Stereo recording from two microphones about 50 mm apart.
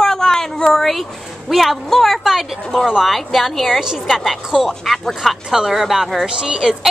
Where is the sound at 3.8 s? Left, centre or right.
Centre.